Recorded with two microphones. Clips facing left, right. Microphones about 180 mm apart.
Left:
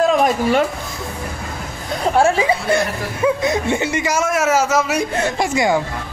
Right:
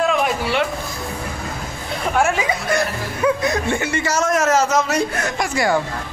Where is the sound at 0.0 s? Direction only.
40° left (ahead or behind).